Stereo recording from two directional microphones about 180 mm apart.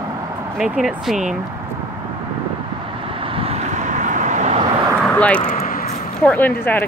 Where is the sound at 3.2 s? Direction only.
30° right (ahead or behind).